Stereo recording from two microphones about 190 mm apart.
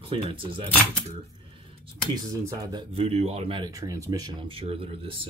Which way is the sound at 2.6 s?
25° right (ahead or behind).